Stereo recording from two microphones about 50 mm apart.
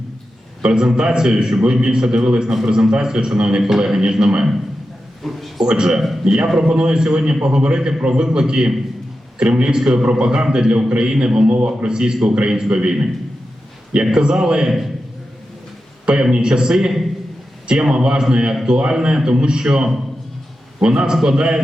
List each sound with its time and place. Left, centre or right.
0.6 s a man's voice: centre
5.2 s a man's voice: centre
5.6 s a man's voice: centre
11.4 s a man's voice: right
16.0 s a man's voice: centre